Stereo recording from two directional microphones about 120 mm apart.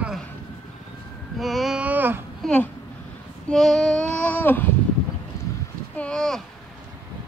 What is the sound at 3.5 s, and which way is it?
Child singing, 5° left (ahead or behind).